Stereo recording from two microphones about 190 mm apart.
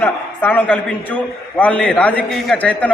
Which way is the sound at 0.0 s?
10° left (ahead or behind).